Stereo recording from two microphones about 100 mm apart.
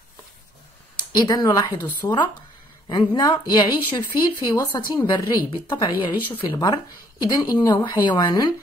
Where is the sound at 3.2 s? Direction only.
45° left (ahead or behind).